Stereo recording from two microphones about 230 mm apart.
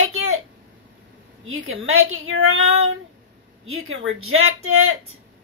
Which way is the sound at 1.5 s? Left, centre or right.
Right.